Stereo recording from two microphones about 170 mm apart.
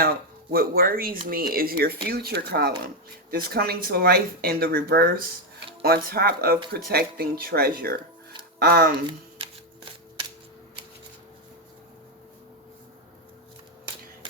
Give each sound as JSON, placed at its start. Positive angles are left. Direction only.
{"t": 0.5, "sound": "speech", "side_deg": -60}